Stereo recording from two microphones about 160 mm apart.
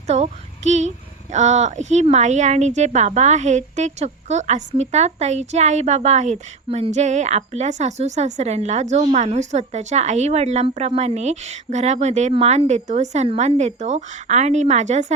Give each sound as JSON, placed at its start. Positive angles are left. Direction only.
{"t": 0.1, "sound": "speech", "side_deg": -45}